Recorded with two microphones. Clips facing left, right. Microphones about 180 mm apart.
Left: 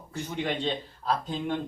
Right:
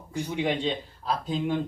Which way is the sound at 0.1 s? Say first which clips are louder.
Right 3 dB; 15° right (ahead or behind).